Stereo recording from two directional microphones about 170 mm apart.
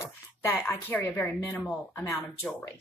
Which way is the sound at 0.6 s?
10° left (ahead or behind).